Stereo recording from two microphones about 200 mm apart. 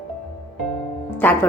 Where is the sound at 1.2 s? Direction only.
10° left (ahead or behind).